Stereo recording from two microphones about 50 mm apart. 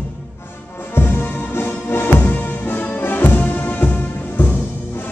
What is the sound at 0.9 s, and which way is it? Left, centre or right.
Music, left.